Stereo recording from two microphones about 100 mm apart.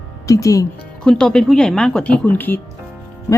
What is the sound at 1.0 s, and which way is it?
Speech, 5° left (ahead or behind).